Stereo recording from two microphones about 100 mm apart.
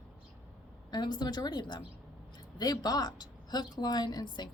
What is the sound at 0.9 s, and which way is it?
A woman's voice, 45° left (ahead or behind).